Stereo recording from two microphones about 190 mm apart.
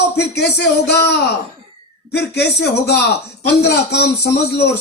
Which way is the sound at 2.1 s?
60° left (ahead or behind).